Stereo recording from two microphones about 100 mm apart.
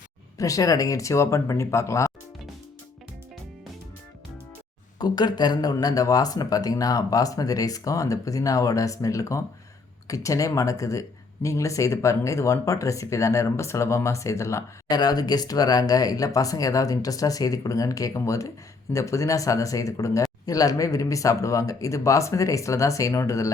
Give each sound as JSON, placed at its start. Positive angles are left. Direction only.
{"t": 0.3, "sound": "a man's voice", "side_deg": 35}
{"t": 4.9, "sound": "a man's voice", "side_deg": 45}
{"t": 14.8, "sound": "a man's voice", "side_deg": 40}